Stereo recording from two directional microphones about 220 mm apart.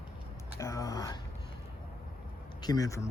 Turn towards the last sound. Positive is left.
turn(degrees=15)  # may be behind; listen again after turning